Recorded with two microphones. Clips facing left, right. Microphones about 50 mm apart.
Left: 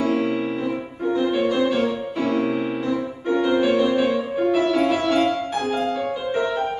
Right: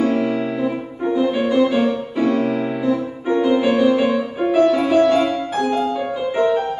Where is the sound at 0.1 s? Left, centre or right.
Centre.